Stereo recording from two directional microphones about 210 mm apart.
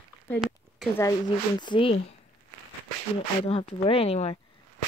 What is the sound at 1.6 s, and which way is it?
Speech, 25° left (ahead or behind).